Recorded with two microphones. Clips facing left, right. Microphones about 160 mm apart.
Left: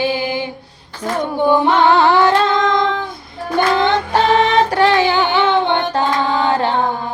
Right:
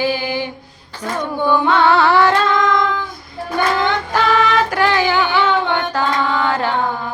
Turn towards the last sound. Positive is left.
turn(degrees=25)  # may be behind; listen again after turning